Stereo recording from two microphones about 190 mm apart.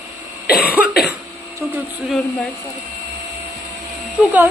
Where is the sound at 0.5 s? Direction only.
55° left (ahead or behind).